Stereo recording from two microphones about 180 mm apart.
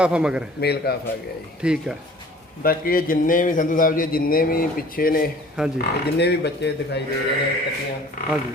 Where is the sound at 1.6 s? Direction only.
5° right (ahead or behind).